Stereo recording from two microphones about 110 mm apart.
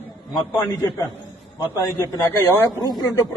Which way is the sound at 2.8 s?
35° left (ahead or behind).